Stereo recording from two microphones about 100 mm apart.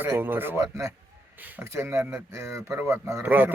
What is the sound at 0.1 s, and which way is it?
Speech, 20° right (ahead or behind).